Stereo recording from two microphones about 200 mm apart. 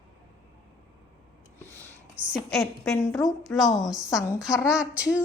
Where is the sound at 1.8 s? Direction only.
10° right (ahead or behind).